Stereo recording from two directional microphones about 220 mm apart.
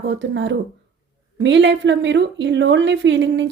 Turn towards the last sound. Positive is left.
turn(degrees=-55)  # may be behind; listen again after turning